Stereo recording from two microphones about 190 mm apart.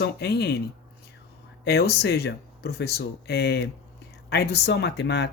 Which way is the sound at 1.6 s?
60° left (ahead or behind).